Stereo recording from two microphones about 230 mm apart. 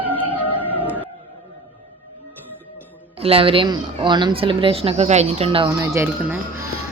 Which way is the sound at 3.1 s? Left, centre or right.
Right.